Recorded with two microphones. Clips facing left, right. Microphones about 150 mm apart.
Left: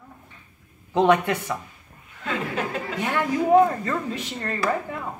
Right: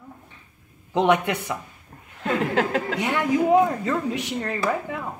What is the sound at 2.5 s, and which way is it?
Speech, 75° right (ahead or behind).